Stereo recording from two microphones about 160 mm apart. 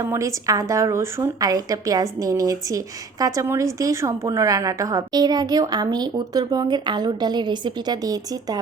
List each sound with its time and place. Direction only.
0.0 s a woman's voice: 20° right (ahead or behind)